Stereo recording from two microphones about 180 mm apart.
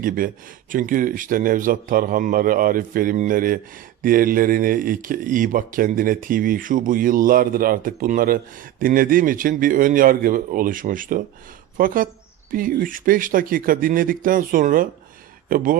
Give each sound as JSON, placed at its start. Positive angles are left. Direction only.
{"t": 0.7, "sound": "speech", "side_deg": -50}